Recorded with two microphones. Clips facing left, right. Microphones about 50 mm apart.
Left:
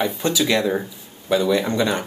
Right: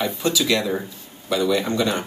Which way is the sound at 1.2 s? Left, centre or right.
Left.